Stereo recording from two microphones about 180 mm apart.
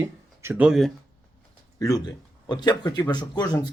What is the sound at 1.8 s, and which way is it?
Speech, 20° left (ahead or behind).